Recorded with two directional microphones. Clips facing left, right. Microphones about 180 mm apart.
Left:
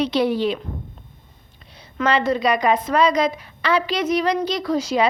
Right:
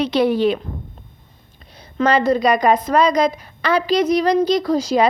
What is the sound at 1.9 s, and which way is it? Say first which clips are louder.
A woman's voice: right 4 dB; 40° right (ahead or behind).